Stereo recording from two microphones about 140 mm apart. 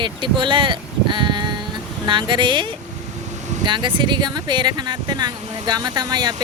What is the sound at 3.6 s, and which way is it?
Speech, 35° right (ahead or behind).